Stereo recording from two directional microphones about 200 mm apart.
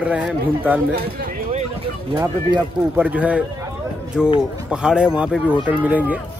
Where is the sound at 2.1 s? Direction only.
15° right (ahead or behind).